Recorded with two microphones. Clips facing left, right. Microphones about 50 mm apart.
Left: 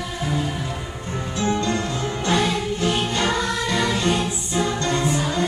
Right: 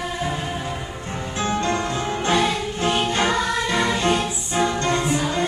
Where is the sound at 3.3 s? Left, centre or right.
Centre.